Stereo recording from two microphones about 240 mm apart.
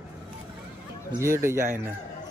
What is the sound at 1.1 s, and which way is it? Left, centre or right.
Speech, centre.